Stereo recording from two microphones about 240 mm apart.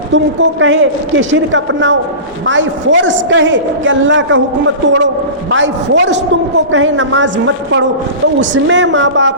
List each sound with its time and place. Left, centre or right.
0.6 s a man's voice: right